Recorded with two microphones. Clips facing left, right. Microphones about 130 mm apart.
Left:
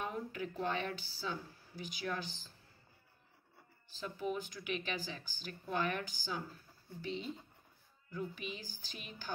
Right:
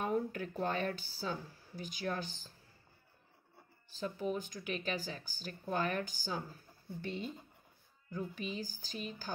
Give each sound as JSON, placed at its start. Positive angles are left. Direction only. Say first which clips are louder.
{"t": 0.0, "sound": "speech", "louder": "right 5 dB", "side_deg": -45}
{"t": 3.9, "sound": "speech", "louder": "right 2 dB", "side_deg": -40}
{"t": 7.0, "sound": "speech", "louder": "even", "side_deg": -55}
{"t": 8.1, "sound": "speech", "louder": "right 2 dB", "side_deg": -40}